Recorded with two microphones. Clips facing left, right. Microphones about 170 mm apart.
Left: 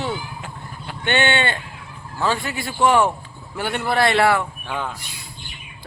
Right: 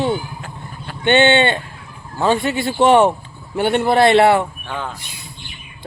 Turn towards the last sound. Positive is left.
turn(degrees=5)  # may be behind; listen again after turning